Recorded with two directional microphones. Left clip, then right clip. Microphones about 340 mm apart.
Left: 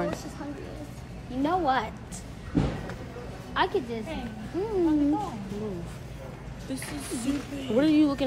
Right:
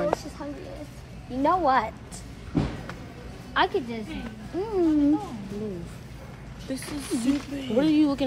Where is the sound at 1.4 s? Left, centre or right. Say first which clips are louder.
Right 4 dB; centre.